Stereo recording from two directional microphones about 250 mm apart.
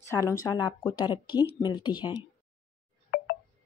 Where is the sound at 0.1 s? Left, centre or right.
Centre.